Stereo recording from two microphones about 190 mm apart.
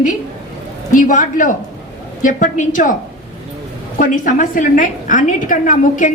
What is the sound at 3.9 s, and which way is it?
A woman's voice, 45° left (ahead or behind).